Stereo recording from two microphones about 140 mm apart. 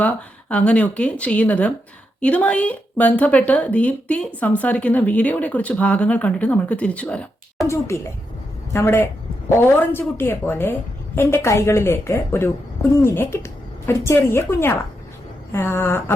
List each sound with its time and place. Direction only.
0.0 s a woman's voice: 10° left (ahead or behind)
7.7 s a woman's voice: 20° left (ahead or behind)